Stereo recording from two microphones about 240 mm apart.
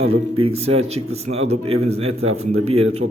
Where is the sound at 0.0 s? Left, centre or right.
Right.